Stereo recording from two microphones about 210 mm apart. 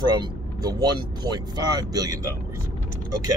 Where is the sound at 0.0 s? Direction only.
20° right (ahead or behind).